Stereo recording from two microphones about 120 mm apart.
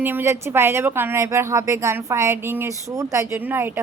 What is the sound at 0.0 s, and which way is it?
Speech, 15° right (ahead or behind).